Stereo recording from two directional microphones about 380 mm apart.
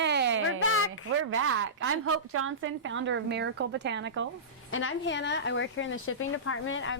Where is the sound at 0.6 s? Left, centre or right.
Left.